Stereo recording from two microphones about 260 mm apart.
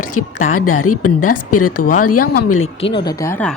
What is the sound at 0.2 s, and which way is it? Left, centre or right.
A woman's voice, left.